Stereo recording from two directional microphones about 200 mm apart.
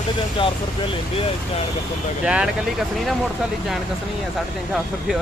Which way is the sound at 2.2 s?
5° right (ahead or behind).